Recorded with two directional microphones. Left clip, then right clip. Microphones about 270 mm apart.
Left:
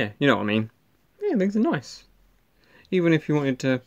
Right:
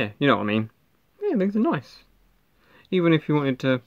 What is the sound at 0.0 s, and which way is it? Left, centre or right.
Speech, centre.